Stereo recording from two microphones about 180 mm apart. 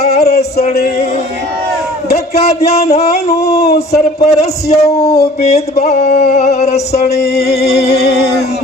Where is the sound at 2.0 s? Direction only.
60° left (ahead or behind).